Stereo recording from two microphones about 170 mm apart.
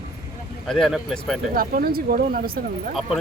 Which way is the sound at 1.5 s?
60° right (ahead or behind).